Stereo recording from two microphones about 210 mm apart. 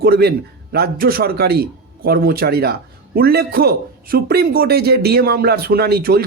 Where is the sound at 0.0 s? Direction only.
50° right (ahead or behind).